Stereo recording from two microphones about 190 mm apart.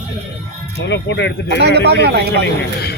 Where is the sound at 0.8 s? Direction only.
70° left (ahead or behind).